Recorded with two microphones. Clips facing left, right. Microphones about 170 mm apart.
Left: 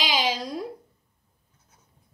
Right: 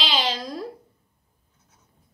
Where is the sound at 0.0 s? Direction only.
10° left (ahead or behind).